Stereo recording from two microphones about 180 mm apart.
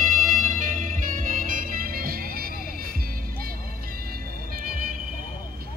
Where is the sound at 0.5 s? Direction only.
45° right (ahead or behind).